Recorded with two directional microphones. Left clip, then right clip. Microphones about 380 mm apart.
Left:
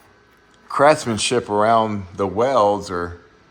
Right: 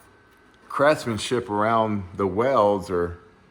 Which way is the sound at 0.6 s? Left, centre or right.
Centre.